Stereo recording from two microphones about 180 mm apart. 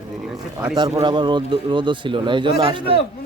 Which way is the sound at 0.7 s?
25° right (ahead or behind).